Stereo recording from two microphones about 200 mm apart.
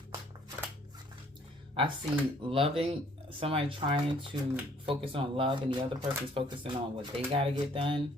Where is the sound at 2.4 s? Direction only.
25° right (ahead or behind).